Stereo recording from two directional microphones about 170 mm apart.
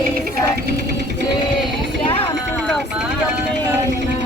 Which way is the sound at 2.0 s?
30° left (ahead or behind).